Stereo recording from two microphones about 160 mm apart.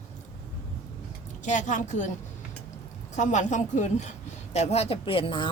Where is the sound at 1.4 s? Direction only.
50° left (ahead or behind).